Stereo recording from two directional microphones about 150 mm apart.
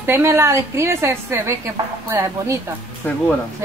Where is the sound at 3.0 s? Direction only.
15° left (ahead or behind).